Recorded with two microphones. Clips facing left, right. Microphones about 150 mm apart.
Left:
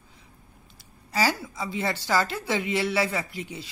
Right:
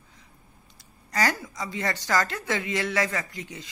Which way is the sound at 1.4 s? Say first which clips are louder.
Left 1 dB; 5° left (ahead or behind).